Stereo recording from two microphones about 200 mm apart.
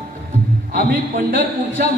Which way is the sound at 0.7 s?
45° right (ahead or behind).